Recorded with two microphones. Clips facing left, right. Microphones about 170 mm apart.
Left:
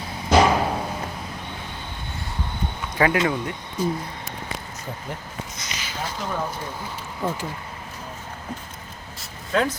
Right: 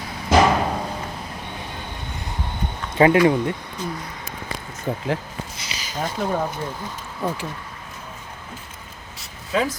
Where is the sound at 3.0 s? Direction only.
25° right (ahead or behind).